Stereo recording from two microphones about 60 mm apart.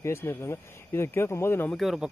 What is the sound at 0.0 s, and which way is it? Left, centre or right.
Speech, left.